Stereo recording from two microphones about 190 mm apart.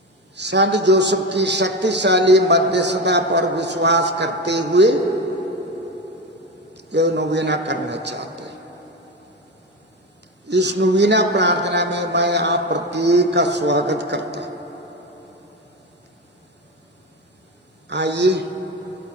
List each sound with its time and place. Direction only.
0.3 s a man's voice: 65° right (ahead or behind)
6.7 s a man's voice: 65° right (ahead or behind)
10.5 s a man's voice: 65° right (ahead or behind)
17.8 s a man's voice: 65° right (ahead or behind)